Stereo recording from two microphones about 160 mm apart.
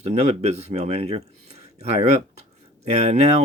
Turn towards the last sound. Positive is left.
turn(degrees=-40)  # may be behind; listen again after turning